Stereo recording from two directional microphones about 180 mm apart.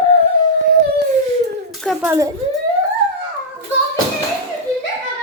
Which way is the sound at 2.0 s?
15° right (ahead or behind).